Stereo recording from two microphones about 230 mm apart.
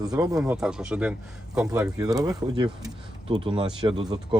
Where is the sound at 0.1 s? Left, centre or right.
Centre.